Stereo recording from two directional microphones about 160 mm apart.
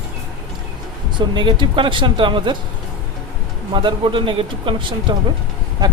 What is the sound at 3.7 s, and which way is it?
Speech, 30° right (ahead or behind).